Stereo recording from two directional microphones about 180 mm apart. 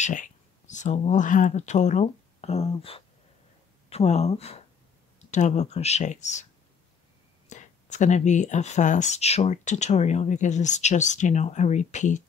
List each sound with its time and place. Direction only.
0.0 s speech: 45° left (ahead or behind)
7.4 s speech: 40° left (ahead or behind)